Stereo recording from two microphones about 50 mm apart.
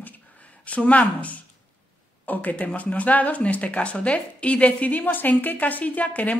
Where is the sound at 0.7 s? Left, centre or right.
Left.